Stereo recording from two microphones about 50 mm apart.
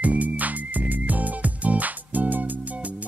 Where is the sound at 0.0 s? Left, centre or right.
Right.